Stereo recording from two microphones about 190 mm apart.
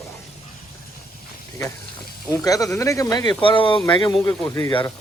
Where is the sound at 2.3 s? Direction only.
20° left (ahead or behind).